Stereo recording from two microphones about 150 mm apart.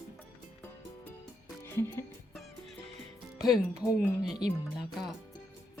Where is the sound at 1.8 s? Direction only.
15° left (ahead or behind).